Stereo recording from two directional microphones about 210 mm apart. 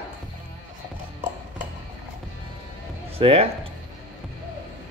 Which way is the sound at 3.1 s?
25° right (ahead or behind).